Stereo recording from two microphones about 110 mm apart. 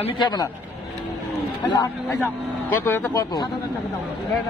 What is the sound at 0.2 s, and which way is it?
Speech, 40° left (ahead or behind).